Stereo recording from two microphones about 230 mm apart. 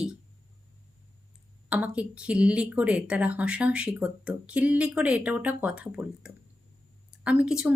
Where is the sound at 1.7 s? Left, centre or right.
Centre.